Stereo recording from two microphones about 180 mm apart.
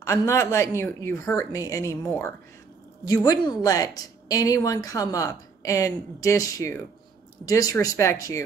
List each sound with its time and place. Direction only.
0.0 s a woman's voice: 15° left (ahead or behind)